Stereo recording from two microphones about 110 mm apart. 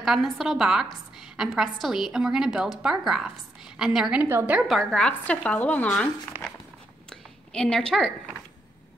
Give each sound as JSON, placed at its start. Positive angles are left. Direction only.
{"t": 0.0, "sound": "a woman's voice", "side_deg": 0}
{"t": 4.3, "sound": "a woman's voice", "side_deg": -20}
{"t": 4.6, "sound": "speech", "side_deg": 0}
{"t": 7.1, "sound": "a sound", "side_deg": 5}